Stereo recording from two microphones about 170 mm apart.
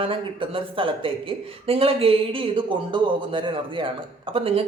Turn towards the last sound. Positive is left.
turn(degrees=-35)  # may be behind; listen again after turning